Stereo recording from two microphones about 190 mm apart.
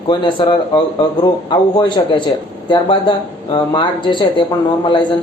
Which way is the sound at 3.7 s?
25° left (ahead or behind).